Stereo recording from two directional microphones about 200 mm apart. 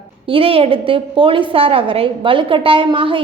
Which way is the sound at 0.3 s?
25° right (ahead or behind).